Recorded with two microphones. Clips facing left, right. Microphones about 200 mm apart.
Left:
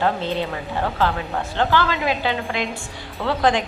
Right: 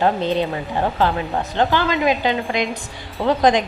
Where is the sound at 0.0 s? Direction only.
15° right (ahead or behind).